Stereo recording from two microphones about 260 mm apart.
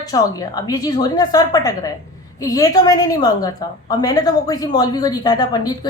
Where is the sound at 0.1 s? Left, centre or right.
Centre.